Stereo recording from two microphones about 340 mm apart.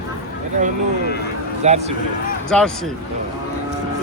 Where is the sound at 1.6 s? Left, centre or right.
Centre.